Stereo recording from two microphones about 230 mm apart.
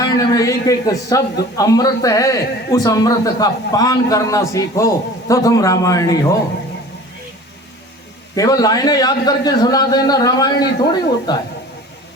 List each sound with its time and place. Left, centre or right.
0.0 s a man's voice: centre
8.4 s a man's voice: centre